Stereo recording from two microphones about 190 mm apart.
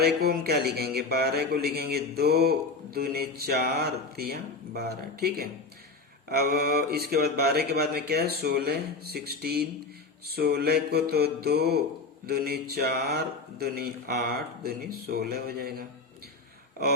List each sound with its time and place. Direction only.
0.0 s speech: 55° right (ahead or behind)